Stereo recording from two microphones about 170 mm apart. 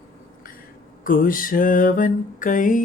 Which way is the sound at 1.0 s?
55° left (ahead or behind).